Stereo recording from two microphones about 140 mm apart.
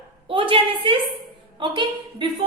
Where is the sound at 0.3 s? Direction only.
40° right (ahead or behind).